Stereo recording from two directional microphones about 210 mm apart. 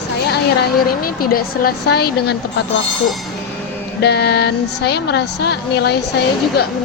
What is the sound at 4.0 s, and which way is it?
A woman's voice, 50° left (ahead or behind).